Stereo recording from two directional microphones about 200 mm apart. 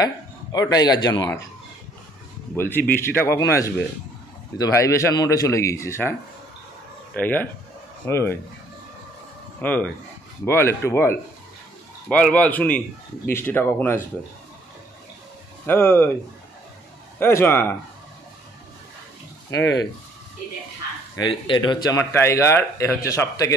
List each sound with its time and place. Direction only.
0.0 s a man's voice: 20° left (ahead or behind)
2.5 s speech: 10° left (ahead or behind)
7.2 s speech: 10° left (ahead or behind)
9.6 s speech: 10° left (ahead or behind)
15.6 s speech: 10° left (ahead or behind)
17.2 s speech: 10° left (ahead or behind)
21.2 s speech: 25° left (ahead or behind)